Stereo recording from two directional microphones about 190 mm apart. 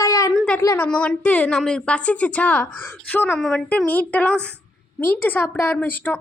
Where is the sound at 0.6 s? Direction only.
15° left (ahead or behind).